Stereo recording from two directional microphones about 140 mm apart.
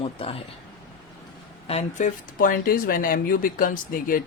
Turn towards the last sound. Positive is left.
turn(degrees=85)